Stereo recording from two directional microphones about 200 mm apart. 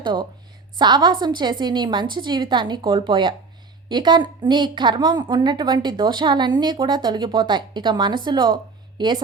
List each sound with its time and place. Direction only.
0.0 s a woman's voice: 25° right (ahead or behind)